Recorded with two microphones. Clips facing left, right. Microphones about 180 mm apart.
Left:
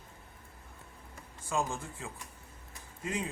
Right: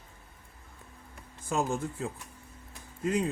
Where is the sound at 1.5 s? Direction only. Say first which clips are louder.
Right 4 dB; 40° right (ahead or behind).